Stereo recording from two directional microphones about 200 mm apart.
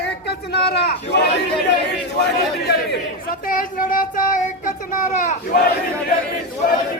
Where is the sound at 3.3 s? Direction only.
45° left (ahead or behind).